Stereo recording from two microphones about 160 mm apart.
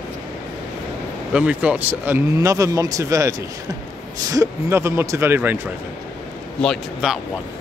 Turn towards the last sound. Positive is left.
turn(degrees=0)  # may be behind; listen again after turning